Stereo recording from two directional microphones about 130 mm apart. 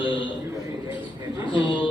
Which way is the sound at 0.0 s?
40° left (ahead or behind).